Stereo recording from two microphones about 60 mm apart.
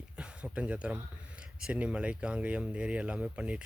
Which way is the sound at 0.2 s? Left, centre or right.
Centre.